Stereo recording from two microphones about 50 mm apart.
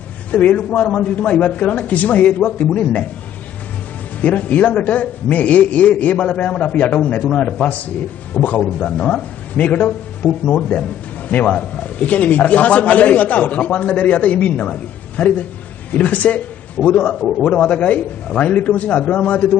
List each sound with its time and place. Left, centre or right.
0.3 s a man's voice: left
4.2 s a man's voice: left
7.3 s a man's voice: centre